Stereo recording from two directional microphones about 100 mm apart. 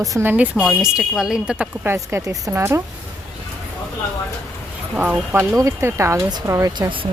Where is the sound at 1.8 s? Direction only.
25° right (ahead or behind).